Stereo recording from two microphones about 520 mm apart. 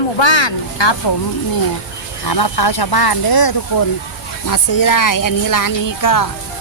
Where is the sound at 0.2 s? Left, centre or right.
Left.